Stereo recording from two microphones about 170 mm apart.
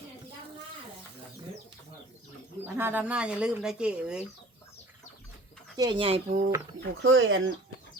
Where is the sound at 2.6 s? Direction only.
10° right (ahead or behind).